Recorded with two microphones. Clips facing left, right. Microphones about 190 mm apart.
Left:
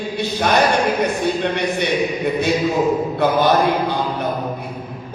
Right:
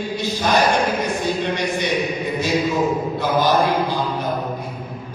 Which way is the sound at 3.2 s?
60° left (ahead or behind).